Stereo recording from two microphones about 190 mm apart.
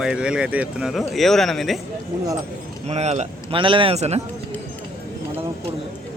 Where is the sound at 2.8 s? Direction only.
35° right (ahead or behind).